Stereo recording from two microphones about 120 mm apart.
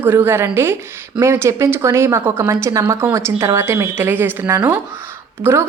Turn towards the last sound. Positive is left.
turn(degrees=-20)  # may be behind; listen again after turning